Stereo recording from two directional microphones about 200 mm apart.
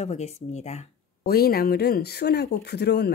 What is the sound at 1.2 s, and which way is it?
Speech, 50° left (ahead or behind).